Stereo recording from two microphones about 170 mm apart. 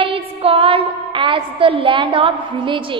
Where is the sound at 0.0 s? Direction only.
35° right (ahead or behind).